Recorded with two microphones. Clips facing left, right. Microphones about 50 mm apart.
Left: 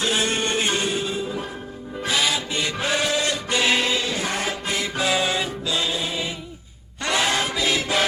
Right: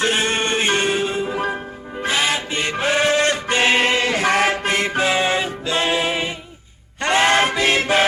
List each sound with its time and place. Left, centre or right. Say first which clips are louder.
0.0 s music: right 3 dB; right
5.0 s music: right 4 dB; right
5.7 s music: right 7 dB; right
7.0 s a sound: right 6 dB; right